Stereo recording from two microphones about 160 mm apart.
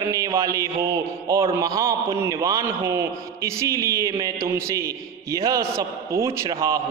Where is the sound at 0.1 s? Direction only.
20° right (ahead or behind).